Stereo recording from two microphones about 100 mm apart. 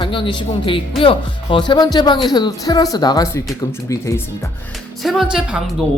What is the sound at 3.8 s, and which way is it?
Speech, 30° left (ahead or behind).